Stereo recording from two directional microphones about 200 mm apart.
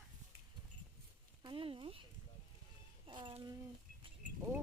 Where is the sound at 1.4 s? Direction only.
25° right (ahead or behind).